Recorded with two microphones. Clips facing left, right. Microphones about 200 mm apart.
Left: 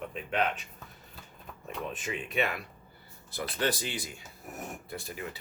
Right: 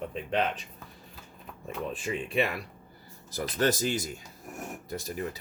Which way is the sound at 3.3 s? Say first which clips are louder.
Right 4 dB; 40° right (ahead or behind).